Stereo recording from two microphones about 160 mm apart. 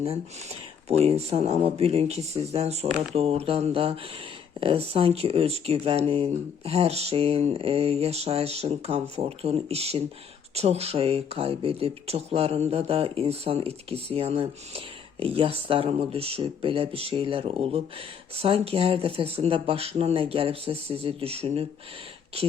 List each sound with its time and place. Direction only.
0.9 s speech: 40° right (ahead or behind)